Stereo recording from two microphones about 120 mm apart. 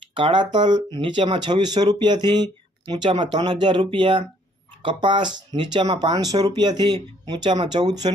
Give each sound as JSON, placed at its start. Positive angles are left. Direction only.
{"t": 0.1, "sound": "speech", "side_deg": -40}